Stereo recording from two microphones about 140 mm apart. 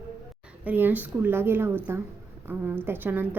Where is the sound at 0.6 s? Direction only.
15° right (ahead or behind).